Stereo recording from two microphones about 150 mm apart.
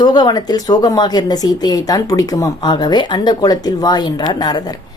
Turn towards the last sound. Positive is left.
turn(degrees=25)  # may be behind; listen again after turning